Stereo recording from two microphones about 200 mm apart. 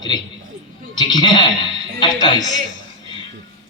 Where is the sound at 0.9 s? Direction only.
20° left (ahead or behind).